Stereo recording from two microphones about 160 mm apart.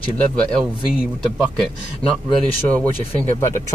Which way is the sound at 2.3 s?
10° left (ahead or behind).